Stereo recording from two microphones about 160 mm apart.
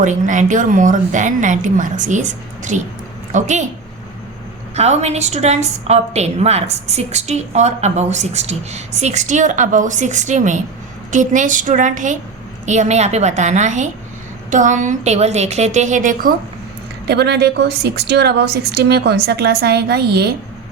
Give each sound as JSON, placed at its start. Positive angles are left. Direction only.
{"t": 0.0, "sound": "a woman's voice", "side_deg": -50}
{"t": 4.7, "sound": "a woman's voice", "side_deg": -45}
{"t": 17.1, "sound": "a woman's voice", "side_deg": -90}